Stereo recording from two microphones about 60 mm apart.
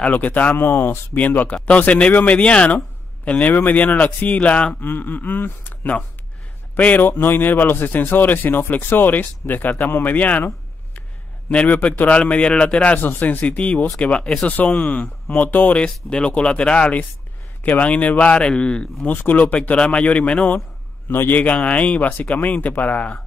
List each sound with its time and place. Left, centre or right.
0.0 s speech: left
4.8 s a man's voice: left
11.4 s speech: left
15.8 s speech: centre
19.0 s speech: left
21.1 s a man's voice: left
21.4 s speech: left